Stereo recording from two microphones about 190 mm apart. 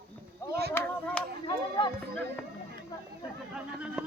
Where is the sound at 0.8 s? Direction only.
10° left (ahead or behind).